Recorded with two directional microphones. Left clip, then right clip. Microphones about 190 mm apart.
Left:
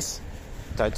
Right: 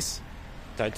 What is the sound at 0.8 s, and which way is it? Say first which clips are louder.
Speech: left 4 dB; 10° left (ahead or behind).